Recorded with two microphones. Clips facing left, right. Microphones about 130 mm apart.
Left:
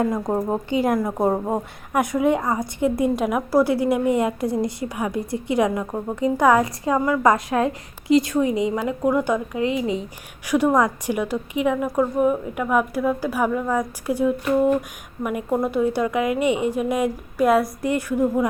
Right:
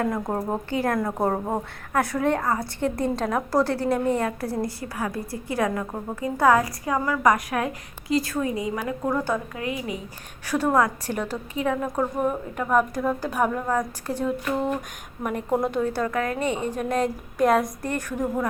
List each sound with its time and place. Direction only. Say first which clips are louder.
0.0 s a woman's voice: left 4 dB; 15° left (ahead or behind)
10.4 s a woman's voice: left 3 dB; 15° left (ahead or behind)